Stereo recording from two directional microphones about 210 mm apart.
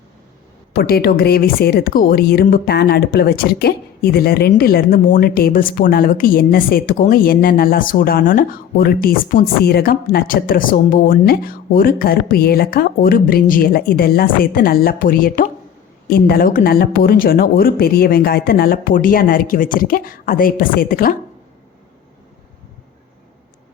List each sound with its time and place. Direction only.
0.7 s a woman's voice: 45° left (ahead or behind)